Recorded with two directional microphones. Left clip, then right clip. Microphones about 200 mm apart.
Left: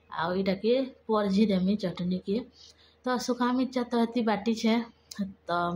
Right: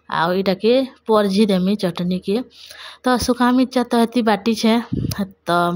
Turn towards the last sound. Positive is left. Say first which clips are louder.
# right 11 dB
turn(degrees=-50)  # may be behind; listen again after turning